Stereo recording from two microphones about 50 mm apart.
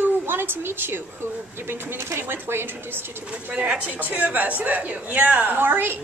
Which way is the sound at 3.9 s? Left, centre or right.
Right.